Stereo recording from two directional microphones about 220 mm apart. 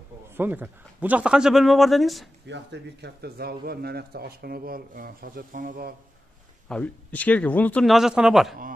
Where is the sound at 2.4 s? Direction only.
50° right (ahead or behind).